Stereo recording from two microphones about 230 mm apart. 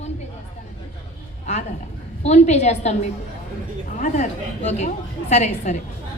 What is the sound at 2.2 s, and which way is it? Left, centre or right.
A woman's voice, left.